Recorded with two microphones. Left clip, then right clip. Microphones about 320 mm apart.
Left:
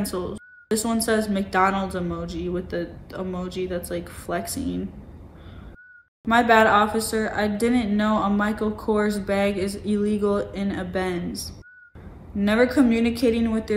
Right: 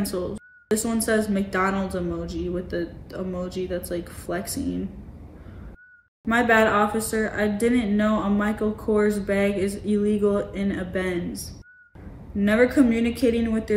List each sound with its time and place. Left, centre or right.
0.0 s a woman's voice: centre
6.2 s speech: centre